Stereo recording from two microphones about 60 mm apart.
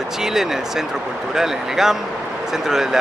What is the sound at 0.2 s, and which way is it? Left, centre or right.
Speech, centre.